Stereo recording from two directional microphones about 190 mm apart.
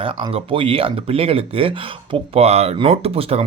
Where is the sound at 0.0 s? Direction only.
30° right (ahead or behind).